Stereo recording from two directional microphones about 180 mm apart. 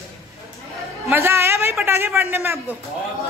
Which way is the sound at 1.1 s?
15° right (ahead or behind).